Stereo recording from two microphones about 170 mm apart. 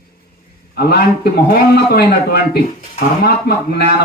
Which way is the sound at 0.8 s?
70° left (ahead or behind).